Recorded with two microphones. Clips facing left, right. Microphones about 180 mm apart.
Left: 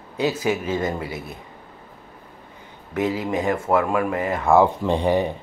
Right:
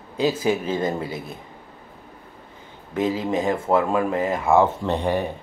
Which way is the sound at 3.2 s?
25° right (ahead or behind).